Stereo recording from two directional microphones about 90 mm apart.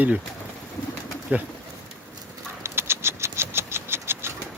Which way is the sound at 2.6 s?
30° right (ahead or behind).